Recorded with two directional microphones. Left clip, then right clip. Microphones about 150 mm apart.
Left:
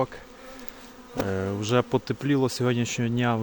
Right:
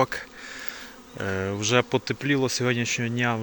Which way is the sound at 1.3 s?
15° left (ahead or behind).